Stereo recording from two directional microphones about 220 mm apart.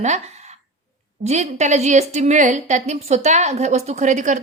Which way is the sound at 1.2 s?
30° right (ahead or behind).